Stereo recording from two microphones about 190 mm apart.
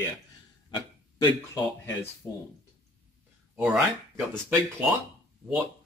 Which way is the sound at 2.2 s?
10° left (ahead or behind).